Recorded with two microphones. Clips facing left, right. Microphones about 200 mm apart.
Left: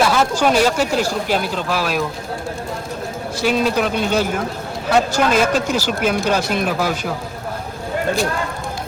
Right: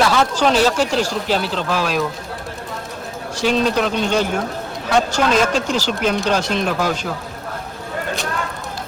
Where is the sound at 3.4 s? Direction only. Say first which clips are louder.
Even; 10° left (ahead or behind).